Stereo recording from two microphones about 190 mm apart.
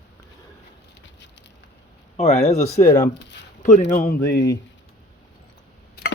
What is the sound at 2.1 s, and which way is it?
Speech, 35° left (ahead or behind).